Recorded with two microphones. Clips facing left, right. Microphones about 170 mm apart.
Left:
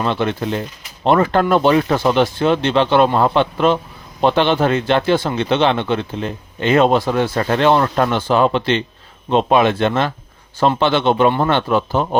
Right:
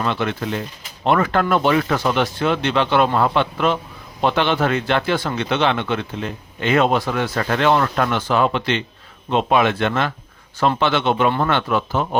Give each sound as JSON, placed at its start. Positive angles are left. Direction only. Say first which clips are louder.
{"t": 0.0, "sound": "speech", "louder": "left 3 dB", "side_deg": 30}
{"t": 11.3, "sound": "speech", "louder": "left 3 dB", "side_deg": 20}
{"t": 11.5, "sound": "speech", "louder": "left 3 dB", "side_deg": 30}